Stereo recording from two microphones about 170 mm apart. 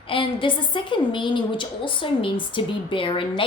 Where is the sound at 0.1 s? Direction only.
30° left (ahead or behind).